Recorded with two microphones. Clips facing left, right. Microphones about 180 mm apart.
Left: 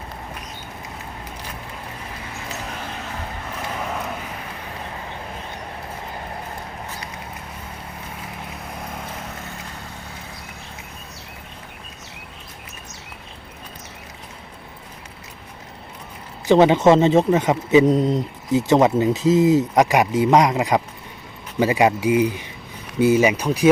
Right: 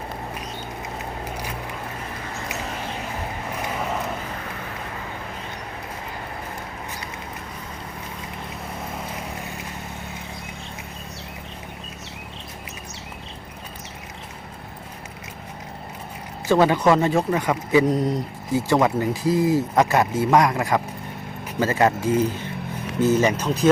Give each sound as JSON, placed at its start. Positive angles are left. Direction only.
{"t": 16.5, "sound": "a man's voice", "side_deg": 20}